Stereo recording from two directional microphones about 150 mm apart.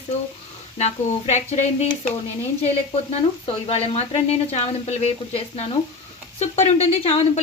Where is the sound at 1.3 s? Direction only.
45° left (ahead or behind).